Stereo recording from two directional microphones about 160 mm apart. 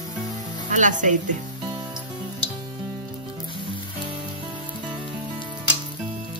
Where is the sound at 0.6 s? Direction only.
50° right (ahead or behind).